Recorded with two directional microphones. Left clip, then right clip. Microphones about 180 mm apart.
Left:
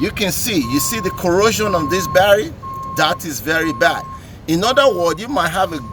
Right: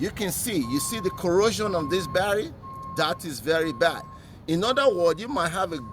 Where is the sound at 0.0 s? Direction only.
45° right (ahead or behind).